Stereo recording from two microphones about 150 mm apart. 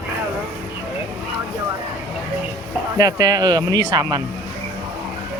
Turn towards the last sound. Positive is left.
turn(degrees=-25)  # may be behind; listen again after turning